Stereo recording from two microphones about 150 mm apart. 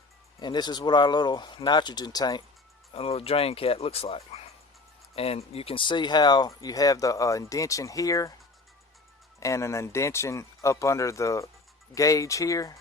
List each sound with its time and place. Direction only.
0.3 s speech: 30° left (ahead or behind)
2.9 s speech: 40° left (ahead or behind); by 8.3 s 20° left (ahead or behind)
9.4 s speech: 20° left (ahead or behind)